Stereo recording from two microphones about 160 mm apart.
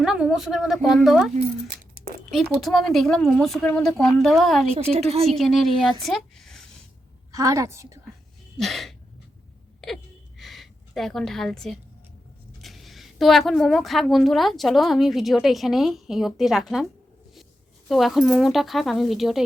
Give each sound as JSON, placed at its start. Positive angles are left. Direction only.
{"t": 0.0, "sound": "a woman's voice", "side_deg": -5}
{"t": 2.3, "sound": "a woman's voice", "side_deg": 0}
{"t": 4.7, "sound": "a woman's voice", "side_deg": -40}
{"t": 5.3, "sound": "a woman's voice", "side_deg": 0}
{"t": 7.3, "sound": "a woman's voice", "side_deg": -20}
{"t": 8.5, "sound": "a sound", "side_deg": 0}
{"t": 12.6, "sound": "a woman's voice", "side_deg": 0}